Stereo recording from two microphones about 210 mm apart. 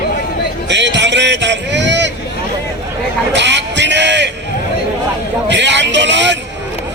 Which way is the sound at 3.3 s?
55° right (ahead or behind).